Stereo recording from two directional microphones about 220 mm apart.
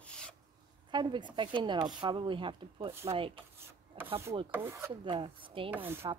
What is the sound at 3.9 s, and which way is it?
Rub, 25° right (ahead or behind).